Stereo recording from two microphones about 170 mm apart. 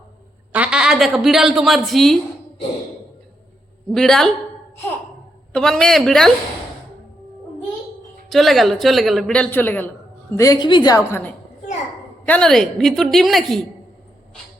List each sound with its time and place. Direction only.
0.5 s a woman's voice: 5° right (ahead or behind)
3.9 s speech: centre (ahead or behind)
5.5 s speech: 5° left (ahead or behind)
8.3 s a woman's voice: centre (ahead or behind); by 11.2 s 20° left (ahead or behind)
12.2 s speech: 5° left (ahead or behind)